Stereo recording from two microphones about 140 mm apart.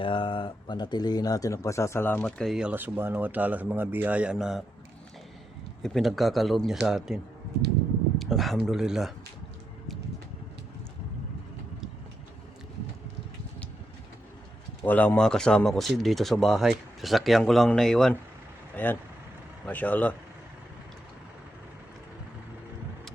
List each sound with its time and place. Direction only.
0.0 s speech: 40° left (ahead or behind); by 2.3 s 15° left (ahead or behind)
2.4 s speech: 5° right (ahead or behind)
5.8 s speech: centre (ahead or behind)
8.2 s speech: centre (ahead or behind)
14.8 s speech: 10° left (ahead or behind)